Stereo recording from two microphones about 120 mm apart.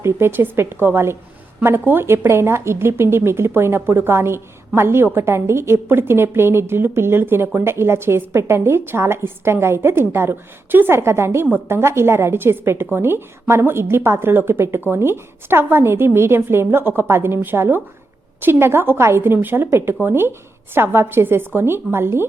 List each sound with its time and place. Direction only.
0.0 s speech: 20° right (ahead or behind)